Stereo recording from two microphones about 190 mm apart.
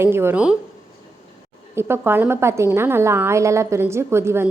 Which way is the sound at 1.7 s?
10° right (ahead or behind).